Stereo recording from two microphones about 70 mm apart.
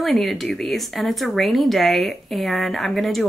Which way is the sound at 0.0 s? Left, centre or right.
Centre.